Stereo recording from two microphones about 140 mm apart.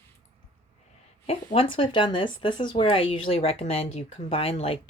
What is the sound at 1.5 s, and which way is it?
A woman's voice, 40° left (ahead or behind).